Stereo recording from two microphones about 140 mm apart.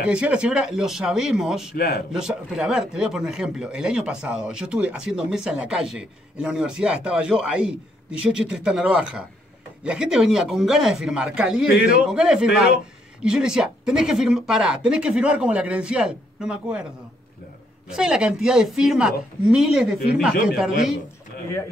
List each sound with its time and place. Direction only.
0.0 s speech: 5° right (ahead or behind)
17.8 s speech: 5° right (ahead or behind)